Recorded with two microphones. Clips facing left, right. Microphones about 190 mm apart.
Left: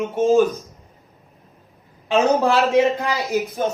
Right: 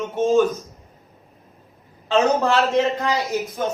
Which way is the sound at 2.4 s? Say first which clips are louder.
Left 2 dB; 15° left (ahead or behind).